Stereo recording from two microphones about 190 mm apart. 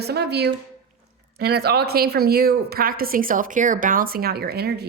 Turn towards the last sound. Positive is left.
turn(degrees=-55)  # may be behind; listen again after turning